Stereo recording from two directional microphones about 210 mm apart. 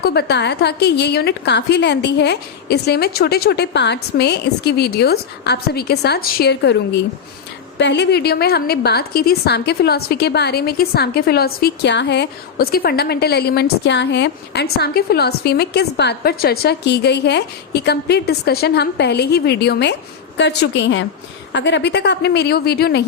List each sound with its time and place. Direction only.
0.0 s a woman's voice: 50° left (ahead or behind)